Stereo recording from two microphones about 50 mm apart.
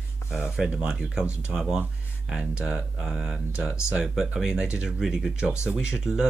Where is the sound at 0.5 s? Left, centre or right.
Centre.